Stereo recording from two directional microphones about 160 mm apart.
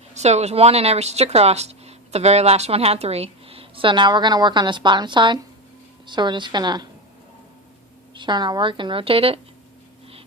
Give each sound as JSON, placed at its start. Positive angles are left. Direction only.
{"t": 0.1, "sound": "a woman's voice", "side_deg": -45}
{"t": 8.1, "sound": "speech", "side_deg": -30}